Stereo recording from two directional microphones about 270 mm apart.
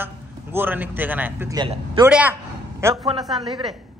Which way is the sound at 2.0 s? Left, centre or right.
Centre.